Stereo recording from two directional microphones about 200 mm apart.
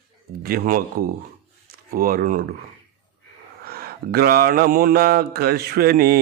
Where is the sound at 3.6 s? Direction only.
50° right (ahead or behind).